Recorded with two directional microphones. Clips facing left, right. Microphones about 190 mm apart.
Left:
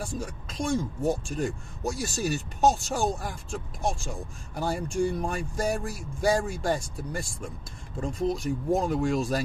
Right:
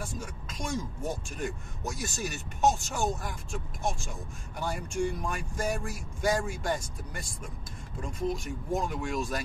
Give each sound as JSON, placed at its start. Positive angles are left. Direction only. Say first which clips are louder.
{"t": 0.0, "sound": "speech", "louder": "left 4 dB", "side_deg": 35}